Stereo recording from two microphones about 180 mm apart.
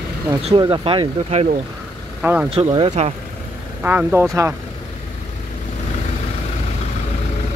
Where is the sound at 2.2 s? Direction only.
10° right (ahead or behind).